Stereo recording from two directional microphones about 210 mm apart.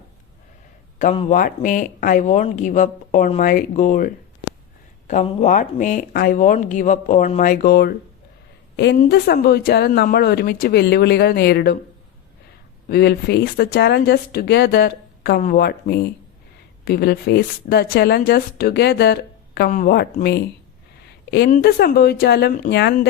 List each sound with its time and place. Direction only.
0.9 s a man's voice: 30° left (ahead or behind); by 11.8 s 50° left (ahead or behind)
12.9 s speech: 50° left (ahead or behind)
21.2 s speech: 50° left (ahead or behind)